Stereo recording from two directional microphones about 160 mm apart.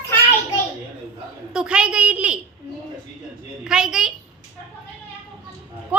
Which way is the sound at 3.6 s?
5° right (ahead or behind).